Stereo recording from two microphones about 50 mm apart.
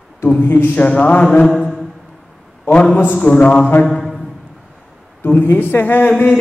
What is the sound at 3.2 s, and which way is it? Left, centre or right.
Mantra, left.